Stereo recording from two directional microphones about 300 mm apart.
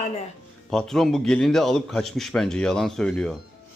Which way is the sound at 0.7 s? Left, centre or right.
Centre.